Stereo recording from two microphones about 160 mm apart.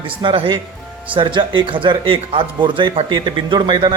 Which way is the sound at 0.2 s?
30° right (ahead or behind).